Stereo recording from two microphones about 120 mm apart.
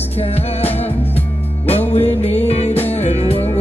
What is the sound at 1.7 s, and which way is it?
Music, 60° left (ahead or behind).